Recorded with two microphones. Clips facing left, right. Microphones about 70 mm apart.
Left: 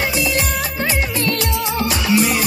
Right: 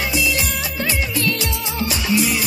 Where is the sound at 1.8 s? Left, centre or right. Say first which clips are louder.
Left 2 dB; left.